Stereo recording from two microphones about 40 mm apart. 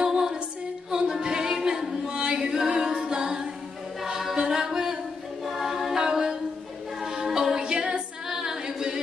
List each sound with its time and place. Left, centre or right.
0.0 s music: centre
1.2 s a sound: centre
2.0 s chant: right
2.5 s a capella: centre
4.0 s choir: centre
4.4 s music: centre
5.4 s a capella: centre
7.6 s a capella: right